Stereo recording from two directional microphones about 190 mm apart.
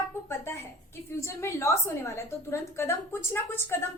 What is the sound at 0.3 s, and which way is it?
A woman's voice, 15° left (ahead or behind).